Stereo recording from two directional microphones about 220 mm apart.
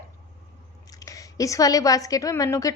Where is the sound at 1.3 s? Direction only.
15° left (ahead or behind).